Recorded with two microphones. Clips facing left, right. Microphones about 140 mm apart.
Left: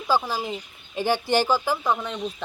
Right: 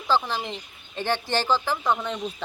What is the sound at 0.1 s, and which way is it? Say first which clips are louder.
Speech: left 1 dB; 10° left (ahead or behind).